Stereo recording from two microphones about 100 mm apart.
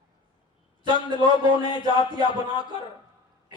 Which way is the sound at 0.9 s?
50° left (ahead or behind).